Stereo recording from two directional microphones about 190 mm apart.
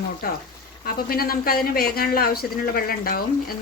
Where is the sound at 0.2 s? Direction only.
50° left (ahead or behind).